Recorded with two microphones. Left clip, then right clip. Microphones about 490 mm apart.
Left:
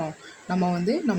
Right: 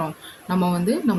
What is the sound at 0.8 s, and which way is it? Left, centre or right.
Speech, right.